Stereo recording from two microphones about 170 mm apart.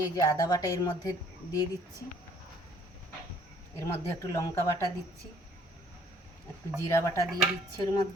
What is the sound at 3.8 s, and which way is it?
Speech, 15° left (ahead or behind).